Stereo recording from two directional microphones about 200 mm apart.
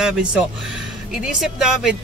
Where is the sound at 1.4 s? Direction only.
Centre (ahead or behind).